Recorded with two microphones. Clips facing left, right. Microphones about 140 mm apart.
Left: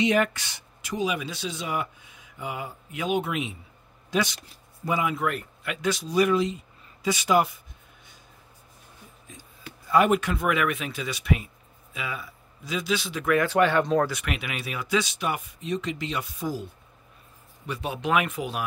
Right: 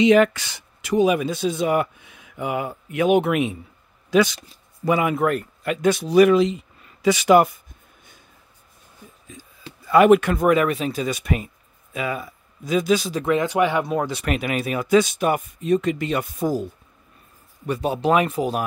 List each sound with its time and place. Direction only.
0.0 s speech: 90° right; by 3.5 s 60° right (ahead or behind)
4.8 s speech: 65° right (ahead or behind)
7.4 s a sound: 50° right (ahead or behind)
9.8 s speech: 90° right
10.3 s speech: 40° right (ahead or behind)
13.2 s speech: 20° right (ahead or behind)
14.2 s speech: 40° right (ahead or behind)
17.6 s speech: 40° right (ahead or behind)